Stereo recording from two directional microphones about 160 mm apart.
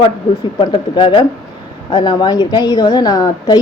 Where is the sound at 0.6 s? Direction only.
30° left (ahead or behind).